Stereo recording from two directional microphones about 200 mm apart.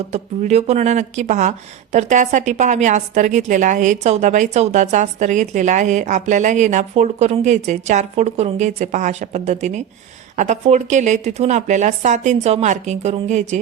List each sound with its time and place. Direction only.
0.1 s speech: 35° right (ahead or behind)